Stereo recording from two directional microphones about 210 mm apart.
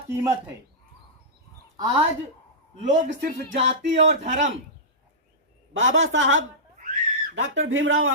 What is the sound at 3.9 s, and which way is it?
Speech, 30° right (ahead or behind).